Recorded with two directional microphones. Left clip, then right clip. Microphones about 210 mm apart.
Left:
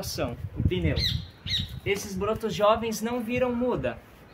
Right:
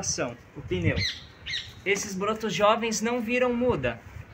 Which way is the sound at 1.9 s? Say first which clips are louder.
Right 2 dB; 10° right (ahead or behind).